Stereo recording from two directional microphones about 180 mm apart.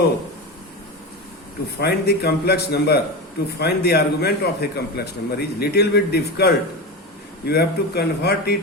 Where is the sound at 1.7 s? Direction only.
65° left (ahead or behind).